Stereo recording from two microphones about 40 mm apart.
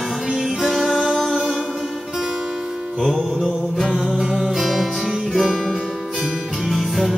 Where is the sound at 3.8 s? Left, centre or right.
Centre.